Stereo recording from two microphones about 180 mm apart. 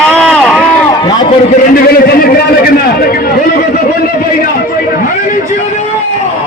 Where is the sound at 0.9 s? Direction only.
20° left (ahead or behind).